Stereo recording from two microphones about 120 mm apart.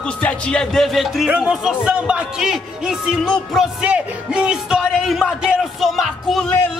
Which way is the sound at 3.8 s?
10° right (ahead or behind).